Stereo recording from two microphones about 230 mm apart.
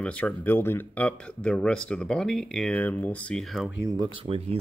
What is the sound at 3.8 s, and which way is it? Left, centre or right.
Speech, centre.